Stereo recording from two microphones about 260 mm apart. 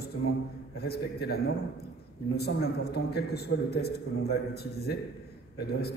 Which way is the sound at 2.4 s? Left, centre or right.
Left.